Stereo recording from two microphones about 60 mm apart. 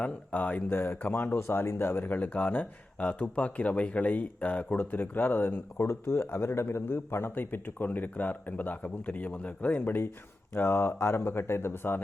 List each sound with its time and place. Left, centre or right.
0.3 s speech: left
2.0 s a man's voice: left